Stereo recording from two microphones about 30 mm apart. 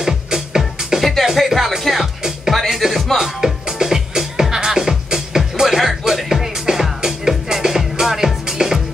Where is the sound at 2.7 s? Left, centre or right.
Centre.